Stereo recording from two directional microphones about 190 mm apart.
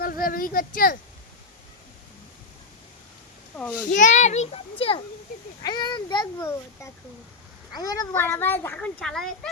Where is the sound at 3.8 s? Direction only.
40° left (ahead or behind).